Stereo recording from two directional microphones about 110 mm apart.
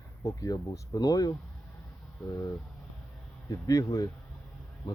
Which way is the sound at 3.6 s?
30° left (ahead or behind).